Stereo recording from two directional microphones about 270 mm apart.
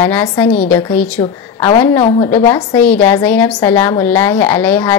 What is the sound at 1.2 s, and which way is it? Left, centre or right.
A woman's voice, left.